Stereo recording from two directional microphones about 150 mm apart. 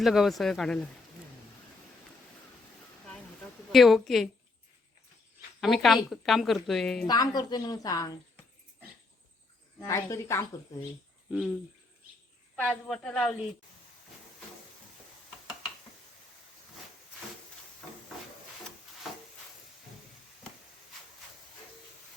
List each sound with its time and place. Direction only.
0.0 s a woman's voice: centre (ahead or behind)
3.7 s a woman's voice: centre (ahead or behind)
5.5 s a woman's voice: centre (ahead or behind)
7.1 s a woman's voice: 25° left (ahead or behind)
9.8 s a woman's voice: 20° left (ahead or behind)
11.3 s a woman's voice: 5° right (ahead or behind)
12.5 s a woman's voice: 5° left (ahead or behind)